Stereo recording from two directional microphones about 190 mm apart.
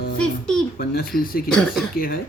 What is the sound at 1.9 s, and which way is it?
Speech, 50° left (ahead or behind).